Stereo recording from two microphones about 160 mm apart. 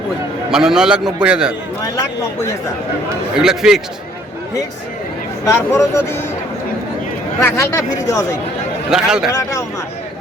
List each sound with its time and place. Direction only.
0.5 s a man's voice: 5° right (ahead or behind)
3.3 s a man's voice: 5° right (ahead or behind)
5.5 s speech: 15° left (ahead or behind)
7.4 s speech: 15° left (ahead or behind)
8.9 s a man's voice: 5° right (ahead or behind)
9.3 s speech: 20° left (ahead or behind)